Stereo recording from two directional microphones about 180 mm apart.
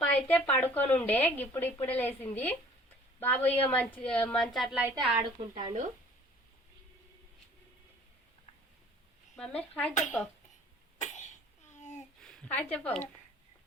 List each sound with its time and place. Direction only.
0.0 s a woman's voice: 5° left (ahead or behind)
5.5 s speech: 40° right (ahead or behind)
9.3 s speech: 5° left (ahead or behind)
11.8 s a sound: 40° left (ahead or behind)
12.2 s a woman's voice: 5° left (ahead or behind)